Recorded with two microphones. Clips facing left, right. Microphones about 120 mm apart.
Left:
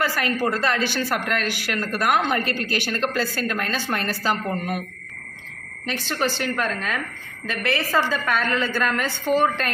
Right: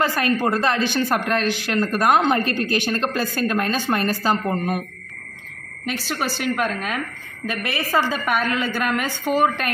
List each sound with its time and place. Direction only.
0.0 s speech: 20° right (ahead or behind)
6.0 s a woman's voice: 10° right (ahead or behind)